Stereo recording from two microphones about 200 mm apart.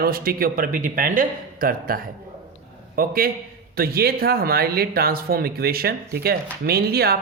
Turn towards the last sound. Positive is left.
turn(degrees=-50)  # may be behind; listen again after turning